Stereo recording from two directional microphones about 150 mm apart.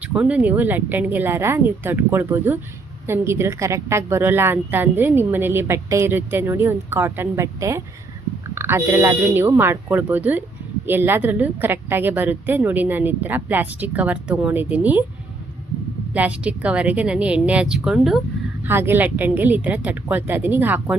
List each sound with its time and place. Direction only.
0.0 s a woman's voice: 10° right (ahead or behind)
16.1 s a woman's voice: 10° right (ahead or behind)
18.6 s a woman's voice: 15° right (ahead or behind)